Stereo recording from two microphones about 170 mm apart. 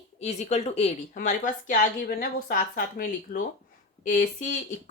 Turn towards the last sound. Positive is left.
turn(degrees=50)  # may be behind; listen again after turning